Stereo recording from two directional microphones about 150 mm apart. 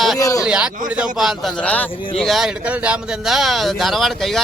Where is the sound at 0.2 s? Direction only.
25° left (ahead or behind).